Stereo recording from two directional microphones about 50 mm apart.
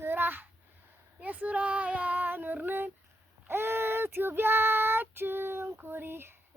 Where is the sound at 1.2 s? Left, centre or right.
Right.